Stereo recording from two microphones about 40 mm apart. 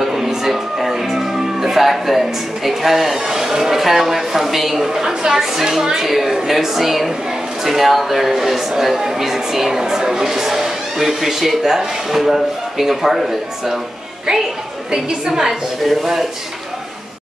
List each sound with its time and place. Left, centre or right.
0.0 s a woman's voice: centre
15.2 s speech: centre